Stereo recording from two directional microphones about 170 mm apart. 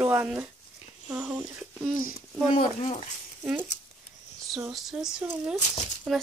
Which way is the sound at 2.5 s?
50° left (ahead or behind).